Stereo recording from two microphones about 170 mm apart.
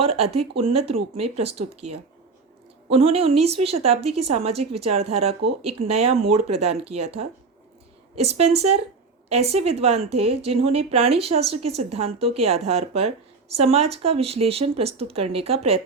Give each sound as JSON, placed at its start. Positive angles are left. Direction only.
{"t": 0.0, "sound": "a woman's voice", "side_deg": -35}
{"t": 2.9, "sound": "a woman's voice", "side_deg": -35}